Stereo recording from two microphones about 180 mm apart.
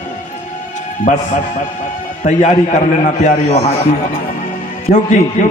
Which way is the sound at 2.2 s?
45° left (ahead or behind).